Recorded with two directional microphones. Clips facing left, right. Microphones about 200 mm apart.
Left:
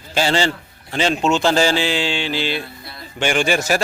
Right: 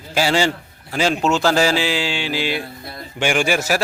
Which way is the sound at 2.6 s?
45° right (ahead or behind).